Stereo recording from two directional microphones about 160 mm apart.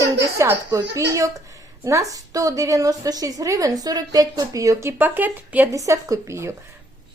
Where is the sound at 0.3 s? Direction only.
20° right (ahead or behind).